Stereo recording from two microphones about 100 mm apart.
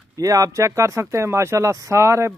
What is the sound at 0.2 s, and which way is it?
Speech, 35° right (ahead or behind).